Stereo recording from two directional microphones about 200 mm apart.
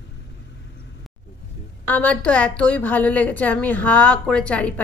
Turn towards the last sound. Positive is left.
turn(degrees=5)  # may be behind; listen again after turning